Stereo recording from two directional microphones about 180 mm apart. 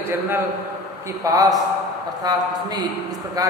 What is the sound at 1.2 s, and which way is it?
A man's voice, 20° right (ahead or behind).